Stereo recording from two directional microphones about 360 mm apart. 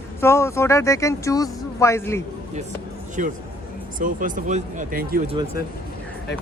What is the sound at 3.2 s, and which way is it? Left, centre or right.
Speech, right.